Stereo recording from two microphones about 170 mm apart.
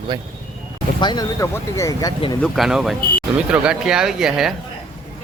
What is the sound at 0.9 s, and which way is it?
Speech, 25° left (ahead or behind).